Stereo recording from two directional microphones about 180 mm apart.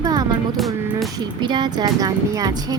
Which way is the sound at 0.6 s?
Centre (ahead or behind).